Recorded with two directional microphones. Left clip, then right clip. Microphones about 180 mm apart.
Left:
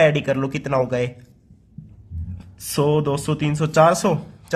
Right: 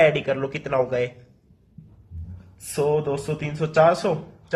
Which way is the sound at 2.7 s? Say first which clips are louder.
Left 2 dB; 35° left (ahead or behind).